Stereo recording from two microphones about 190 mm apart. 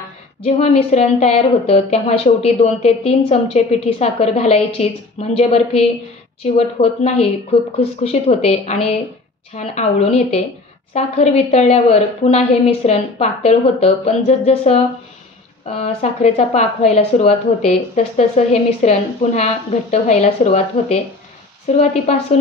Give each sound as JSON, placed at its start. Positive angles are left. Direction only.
{"t": 0.6, "sound": "speech", "side_deg": 35}